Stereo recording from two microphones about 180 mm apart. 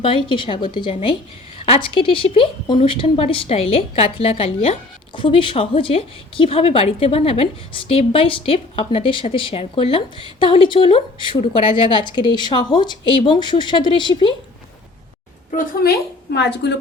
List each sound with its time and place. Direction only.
0.0 s a woman's voice: 30° left (ahead or behind)
15.5 s a woman's voice: 60° left (ahead or behind)